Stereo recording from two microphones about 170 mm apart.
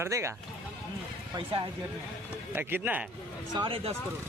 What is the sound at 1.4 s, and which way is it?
Speech, 30° right (ahead or behind).